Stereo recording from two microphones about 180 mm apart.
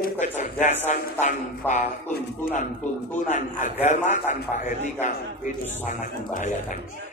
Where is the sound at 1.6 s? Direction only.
10° left (ahead or behind).